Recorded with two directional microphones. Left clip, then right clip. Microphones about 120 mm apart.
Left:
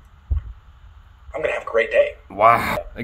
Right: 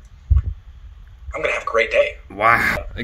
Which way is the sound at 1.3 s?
Centre (ahead or behind).